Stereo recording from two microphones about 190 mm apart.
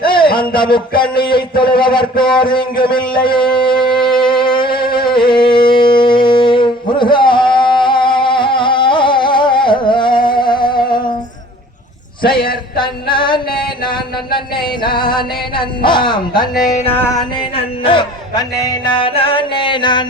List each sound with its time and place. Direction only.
0.1 s music: 25° left (ahead or behind)
12.7 s music: 25° left (ahead or behind)
17.5 s music: 30° left (ahead or behind)